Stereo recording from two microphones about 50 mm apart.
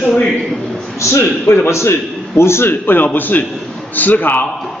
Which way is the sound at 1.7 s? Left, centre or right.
Left.